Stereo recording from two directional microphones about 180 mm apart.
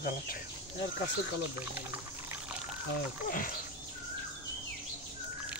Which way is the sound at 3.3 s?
50° left (ahead or behind).